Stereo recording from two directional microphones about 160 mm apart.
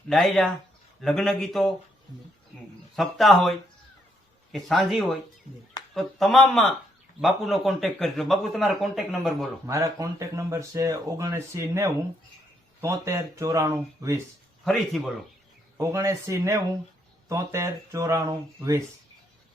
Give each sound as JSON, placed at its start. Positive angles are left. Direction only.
{"t": 0.1, "sound": "a man's voice", "side_deg": 0}
{"t": 2.9, "sound": "a man's voice", "side_deg": 0}
{"t": 4.5, "sound": "a man's voice", "side_deg": 0}
{"t": 9.6, "sound": "speech", "side_deg": -20}
{"t": 14.6, "sound": "a man's voice", "side_deg": 0}
{"t": 15.8, "sound": "speech", "side_deg": -20}